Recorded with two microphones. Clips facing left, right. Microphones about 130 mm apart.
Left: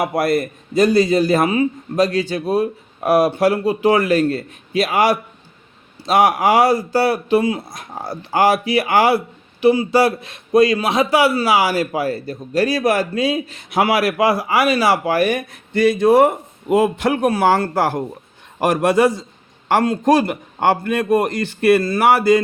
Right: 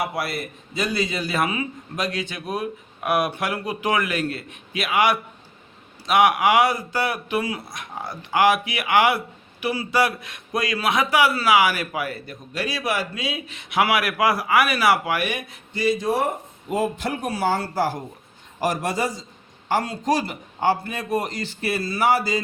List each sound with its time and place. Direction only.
0.0 s a man's voice: 45° left (ahead or behind)
13.8 s a man's voice: 30° left (ahead or behind); by 22.4 s 60° left (ahead or behind)